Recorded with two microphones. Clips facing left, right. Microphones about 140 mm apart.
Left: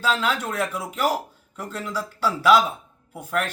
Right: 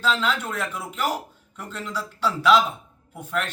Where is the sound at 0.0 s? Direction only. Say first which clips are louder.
Left 1 dB; 10° left (ahead or behind).